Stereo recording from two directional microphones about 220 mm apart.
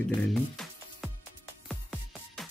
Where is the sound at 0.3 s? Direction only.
Centre (ahead or behind).